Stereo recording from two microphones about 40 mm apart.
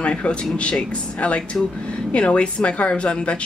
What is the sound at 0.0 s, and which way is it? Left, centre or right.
Speech, left.